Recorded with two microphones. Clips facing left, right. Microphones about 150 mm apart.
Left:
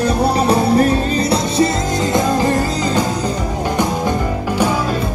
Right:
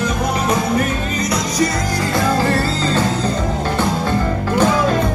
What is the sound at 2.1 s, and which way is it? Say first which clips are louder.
Music: left 1 dB; 15° left (ahead or behind).